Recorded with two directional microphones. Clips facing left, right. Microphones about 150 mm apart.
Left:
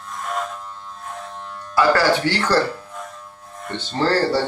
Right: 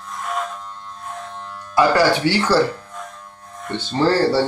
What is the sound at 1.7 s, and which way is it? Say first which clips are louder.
Speech: right 1 dB; 15° right (ahead or behind).